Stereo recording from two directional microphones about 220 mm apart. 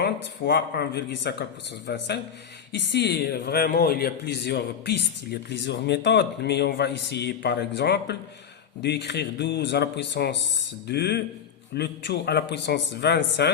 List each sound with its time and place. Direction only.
0.0 s a man's voice: 50° left (ahead or behind)